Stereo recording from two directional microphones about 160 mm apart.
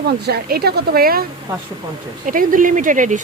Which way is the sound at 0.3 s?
75° right (ahead or behind).